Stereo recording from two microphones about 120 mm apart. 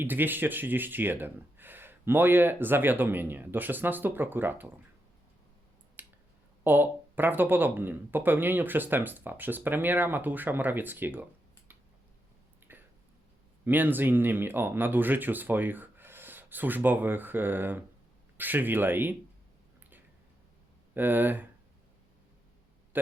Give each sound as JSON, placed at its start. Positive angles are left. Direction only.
{"t": 0.0, "sound": "speech", "side_deg": -15}
{"t": 6.0, "sound": "finger snapping", "side_deg": -15}
{"t": 6.7, "sound": "speech", "side_deg": -15}
{"t": 12.7, "sound": "a sound", "side_deg": -15}
{"t": 13.7, "sound": "speech", "side_deg": -15}
{"t": 20.9, "sound": "speech", "side_deg": -15}